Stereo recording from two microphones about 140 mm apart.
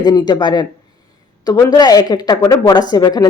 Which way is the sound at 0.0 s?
30° left (ahead or behind).